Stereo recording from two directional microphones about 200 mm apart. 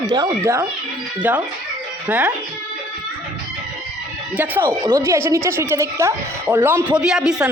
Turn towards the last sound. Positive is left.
turn(degrees=-5)  # may be behind; listen again after turning